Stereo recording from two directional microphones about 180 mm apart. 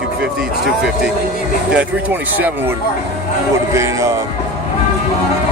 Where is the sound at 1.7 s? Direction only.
10° right (ahead or behind).